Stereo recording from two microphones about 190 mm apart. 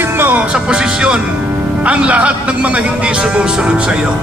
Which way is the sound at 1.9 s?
5° right (ahead or behind).